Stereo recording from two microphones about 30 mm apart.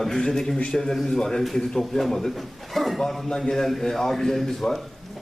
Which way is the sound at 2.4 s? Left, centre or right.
Centre.